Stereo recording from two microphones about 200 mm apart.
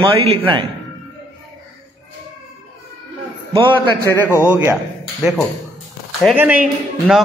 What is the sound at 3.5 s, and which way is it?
Speech, 25° right (ahead or behind).